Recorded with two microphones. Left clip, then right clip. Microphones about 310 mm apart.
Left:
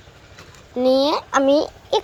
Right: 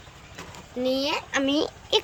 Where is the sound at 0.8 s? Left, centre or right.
Centre.